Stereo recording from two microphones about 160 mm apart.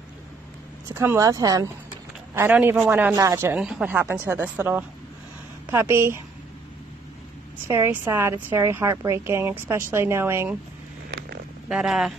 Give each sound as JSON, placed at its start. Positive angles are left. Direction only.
{"t": 0.9, "sound": "a woman's voice", "side_deg": -15}
{"t": 7.6, "sound": "a woman's voice", "side_deg": -15}
{"t": 11.1, "sound": "a sound", "side_deg": -85}
{"t": 11.7, "sound": "speech", "side_deg": 0}